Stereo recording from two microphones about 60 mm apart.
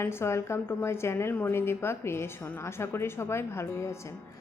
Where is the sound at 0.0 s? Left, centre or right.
Left.